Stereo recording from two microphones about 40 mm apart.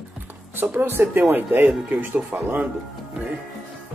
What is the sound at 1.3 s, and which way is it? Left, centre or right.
Speech, right.